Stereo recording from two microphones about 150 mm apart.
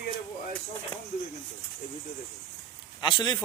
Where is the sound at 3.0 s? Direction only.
30° left (ahead or behind).